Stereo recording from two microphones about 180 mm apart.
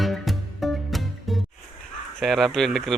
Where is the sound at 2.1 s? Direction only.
Centre (ahead or behind).